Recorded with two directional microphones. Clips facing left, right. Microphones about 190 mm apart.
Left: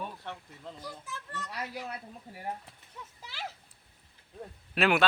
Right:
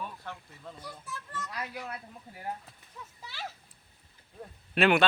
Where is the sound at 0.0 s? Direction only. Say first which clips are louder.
Left 1 dB; 25° left (ahead or behind).